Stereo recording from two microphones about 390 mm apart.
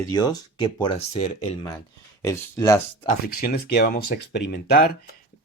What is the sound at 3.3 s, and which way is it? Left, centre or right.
Speech, left.